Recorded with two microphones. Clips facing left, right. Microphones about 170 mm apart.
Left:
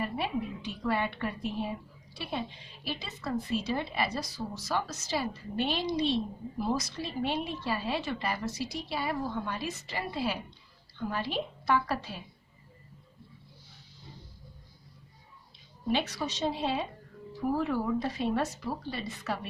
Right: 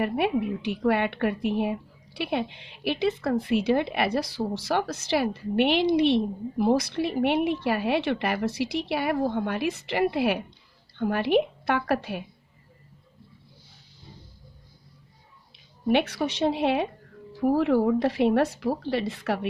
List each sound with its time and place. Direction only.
0.0 s a woman's voice: 65° right (ahead or behind)
15.9 s a woman's voice: 60° right (ahead or behind)